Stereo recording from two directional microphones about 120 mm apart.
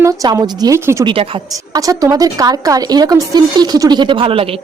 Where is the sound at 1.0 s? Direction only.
50° right (ahead or behind).